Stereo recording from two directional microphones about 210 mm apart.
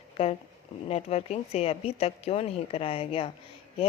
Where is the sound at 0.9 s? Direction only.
30° left (ahead or behind).